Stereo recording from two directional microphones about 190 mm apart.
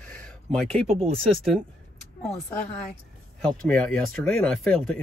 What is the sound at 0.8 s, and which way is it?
Speech, 30° right (ahead or behind).